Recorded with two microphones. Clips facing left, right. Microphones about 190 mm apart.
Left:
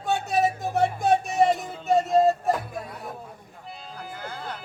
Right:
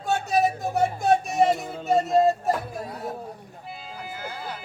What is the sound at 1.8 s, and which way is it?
Music, centre (ahead or behind).